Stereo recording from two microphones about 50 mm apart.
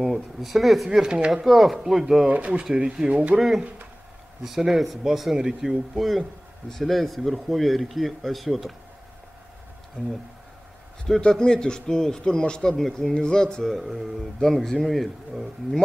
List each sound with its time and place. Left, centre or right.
0.0 s speech: centre
1.0 s speech: centre
1.3 s speech: centre
2.2 s speech: right
2.6 s speech: centre
3.3 s speech: centre
11.1 s speech: centre